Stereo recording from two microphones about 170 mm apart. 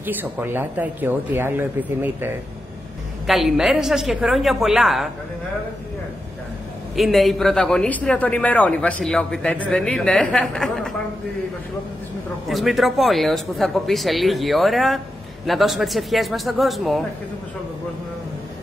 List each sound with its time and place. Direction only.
0.0 s speech: 10° right (ahead or behind)
3.3 s a man's voice: centre (ahead or behind)
7.0 s a man's voice: centre (ahead or behind)
12.4 s a man's voice: centre (ahead or behind)